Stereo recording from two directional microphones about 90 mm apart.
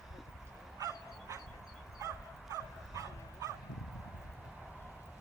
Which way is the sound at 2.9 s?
40° right (ahead or behind).